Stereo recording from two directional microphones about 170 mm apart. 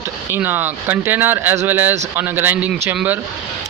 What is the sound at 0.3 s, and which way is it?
Speech, 10° right (ahead or behind).